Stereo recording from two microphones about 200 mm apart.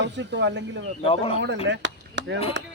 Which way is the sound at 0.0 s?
60° right (ahead or behind).